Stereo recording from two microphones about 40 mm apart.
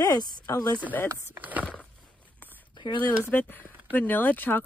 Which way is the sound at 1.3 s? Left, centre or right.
Right.